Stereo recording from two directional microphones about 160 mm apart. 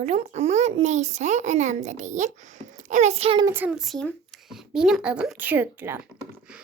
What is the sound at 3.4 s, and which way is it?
A child's voice, 10° right (ahead or behind).